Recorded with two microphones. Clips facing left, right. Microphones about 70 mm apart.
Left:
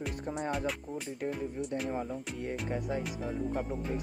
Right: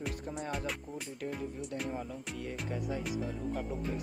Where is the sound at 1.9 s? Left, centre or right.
Left.